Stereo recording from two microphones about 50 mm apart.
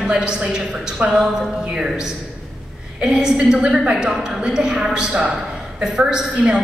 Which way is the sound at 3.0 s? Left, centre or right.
Centre.